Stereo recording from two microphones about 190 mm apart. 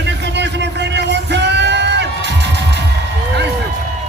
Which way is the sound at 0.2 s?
65° right (ahead or behind).